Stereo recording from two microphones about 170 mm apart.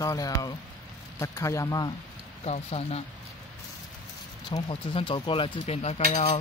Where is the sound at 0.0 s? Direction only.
20° left (ahead or behind).